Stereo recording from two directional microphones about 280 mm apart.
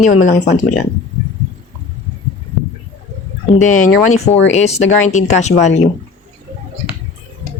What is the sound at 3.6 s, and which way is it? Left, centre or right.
Speech, left.